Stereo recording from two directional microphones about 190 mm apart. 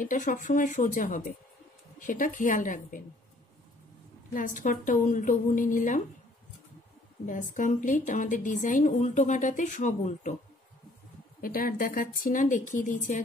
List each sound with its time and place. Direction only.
0.0 s speech: 45° left (ahead or behind)
4.3 s speech: 45° left (ahead or behind)
7.5 s a woman's voice: 40° left (ahead or behind)
11.4 s speech: 50° left (ahead or behind)